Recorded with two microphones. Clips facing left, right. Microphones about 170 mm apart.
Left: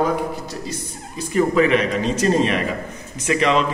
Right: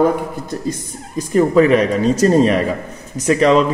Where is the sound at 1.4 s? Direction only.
40° right (ahead or behind).